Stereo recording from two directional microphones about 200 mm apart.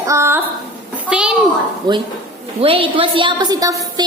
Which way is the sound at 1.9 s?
20° right (ahead or behind).